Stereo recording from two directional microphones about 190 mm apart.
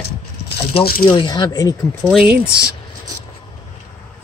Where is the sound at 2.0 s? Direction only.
Centre (ahead or behind).